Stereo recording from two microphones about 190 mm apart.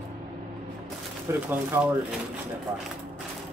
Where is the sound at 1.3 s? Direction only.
15° right (ahead or behind).